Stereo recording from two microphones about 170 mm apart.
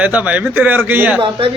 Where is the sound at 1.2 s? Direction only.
30° right (ahead or behind).